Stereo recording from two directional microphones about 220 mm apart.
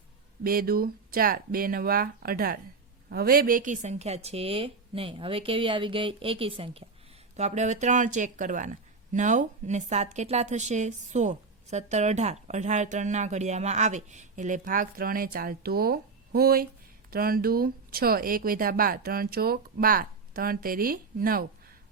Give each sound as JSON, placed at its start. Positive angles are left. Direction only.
{"t": 0.4, "sound": "speech", "side_deg": -40}